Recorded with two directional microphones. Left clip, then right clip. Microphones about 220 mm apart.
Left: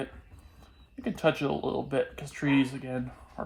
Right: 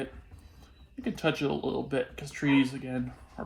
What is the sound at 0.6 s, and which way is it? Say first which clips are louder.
Speech: even; 25° left (ahead or behind).